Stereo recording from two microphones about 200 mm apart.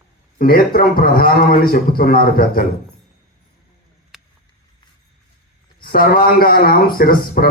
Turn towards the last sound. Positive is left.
turn(degrees=50)  # may be behind; listen again after turning